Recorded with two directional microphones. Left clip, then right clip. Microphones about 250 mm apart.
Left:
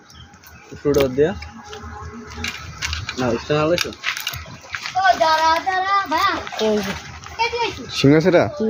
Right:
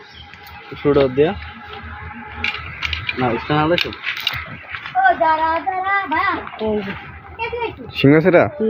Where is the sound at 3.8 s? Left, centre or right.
Left.